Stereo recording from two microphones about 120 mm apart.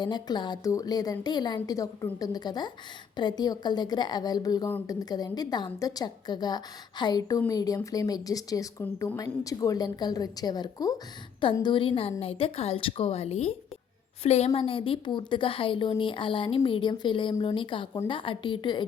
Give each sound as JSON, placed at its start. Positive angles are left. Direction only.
{"t": 0.0, "sound": "a woman's voice", "side_deg": 35}
{"t": 11.6, "sound": "a woman's voice", "side_deg": 45}